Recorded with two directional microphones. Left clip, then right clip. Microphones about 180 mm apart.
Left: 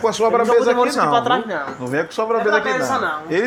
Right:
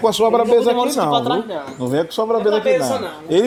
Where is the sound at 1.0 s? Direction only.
15° right (ahead or behind).